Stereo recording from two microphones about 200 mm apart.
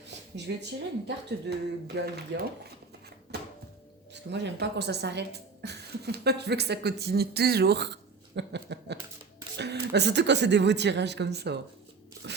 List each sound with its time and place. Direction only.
0.3 s a woman's voice: 60° right (ahead or behind)
4.1 s a woman's voice: 60° right (ahead or behind)
8.4 s a sound: 60° right (ahead or behind)
9.6 s a woman's voice: 55° right (ahead or behind)